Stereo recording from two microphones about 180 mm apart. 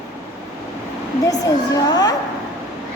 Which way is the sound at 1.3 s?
20° left (ahead or behind).